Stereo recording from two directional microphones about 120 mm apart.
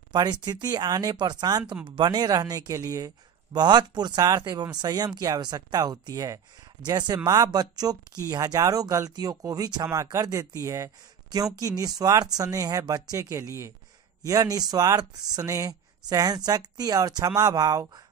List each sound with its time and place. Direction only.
0.1 s speech: 35° right (ahead or behind)